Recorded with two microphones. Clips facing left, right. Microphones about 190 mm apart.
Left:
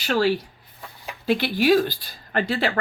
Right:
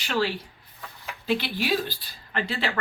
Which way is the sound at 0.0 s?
45° left (ahead or behind).